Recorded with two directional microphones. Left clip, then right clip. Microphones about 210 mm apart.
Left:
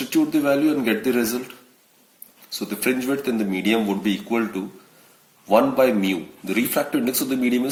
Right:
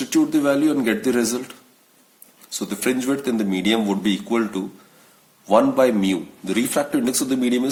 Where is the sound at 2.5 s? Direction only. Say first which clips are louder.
Even; 35° right (ahead or behind).